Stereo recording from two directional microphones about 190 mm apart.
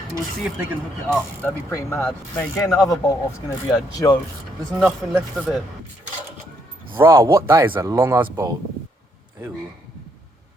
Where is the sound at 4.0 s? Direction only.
20° left (ahead or behind).